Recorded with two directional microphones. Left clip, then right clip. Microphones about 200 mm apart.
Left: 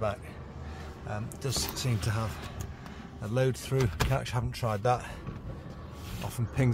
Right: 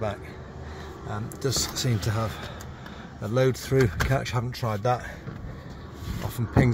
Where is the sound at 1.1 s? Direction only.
20° right (ahead or behind).